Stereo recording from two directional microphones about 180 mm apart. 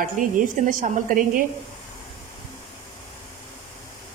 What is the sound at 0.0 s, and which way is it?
A woman's voice, 50° right (ahead or behind).